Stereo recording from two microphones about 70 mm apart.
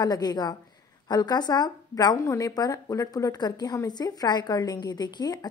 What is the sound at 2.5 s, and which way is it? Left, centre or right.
Speech, left.